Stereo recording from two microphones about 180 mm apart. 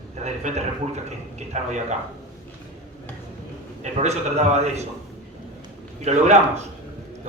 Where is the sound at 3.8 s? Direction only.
35° right (ahead or behind).